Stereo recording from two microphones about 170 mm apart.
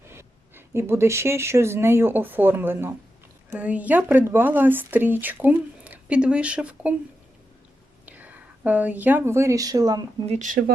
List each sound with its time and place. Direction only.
0.1 s speech: 15° right (ahead or behind)
8.0 s speech: 10° right (ahead or behind)
10.2 s speech: 45° right (ahead or behind)